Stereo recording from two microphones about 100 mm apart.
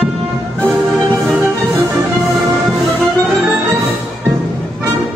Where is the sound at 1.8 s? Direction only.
35° right (ahead or behind).